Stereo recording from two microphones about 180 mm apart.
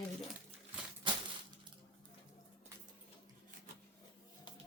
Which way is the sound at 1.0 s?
25° right (ahead or behind).